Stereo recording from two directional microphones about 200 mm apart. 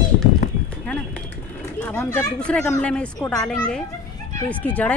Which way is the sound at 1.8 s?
10° left (ahead or behind).